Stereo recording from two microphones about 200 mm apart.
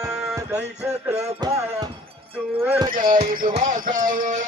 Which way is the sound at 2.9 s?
40° right (ahead or behind).